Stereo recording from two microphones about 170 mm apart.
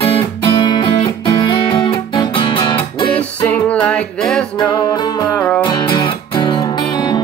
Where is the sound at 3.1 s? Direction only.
10° left (ahead or behind).